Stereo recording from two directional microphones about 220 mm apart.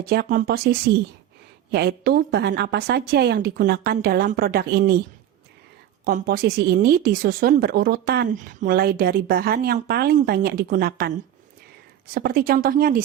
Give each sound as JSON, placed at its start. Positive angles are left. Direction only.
{"t": 0.0, "sound": "speech", "side_deg": -40}
{"t": 6.1, "sound": "speech", "side_deg": -40}
{"t": 12.1, "sound": "speech", "side_deg": -40}